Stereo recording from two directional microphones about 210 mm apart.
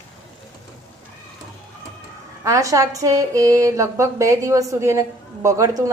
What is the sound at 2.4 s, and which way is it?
Speech, 15° right (ahead or behind).